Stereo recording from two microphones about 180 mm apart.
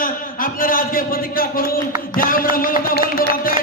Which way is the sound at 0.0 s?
50° left (ahead or behind).